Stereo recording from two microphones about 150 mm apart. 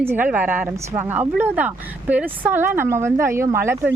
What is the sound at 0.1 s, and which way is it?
Speech, 15° right (ahead or behind).